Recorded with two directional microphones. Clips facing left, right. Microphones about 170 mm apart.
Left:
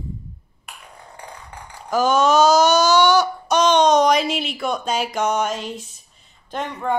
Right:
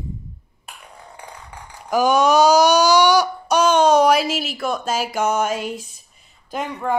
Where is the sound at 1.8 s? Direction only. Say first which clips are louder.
Right 1 dB; 15° right (ahead or behind).